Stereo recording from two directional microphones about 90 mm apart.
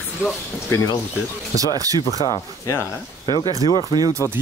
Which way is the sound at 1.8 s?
40° right (ahead or behind).